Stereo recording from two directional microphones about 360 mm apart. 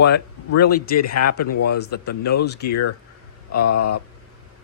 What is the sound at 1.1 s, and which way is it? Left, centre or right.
Speech, left.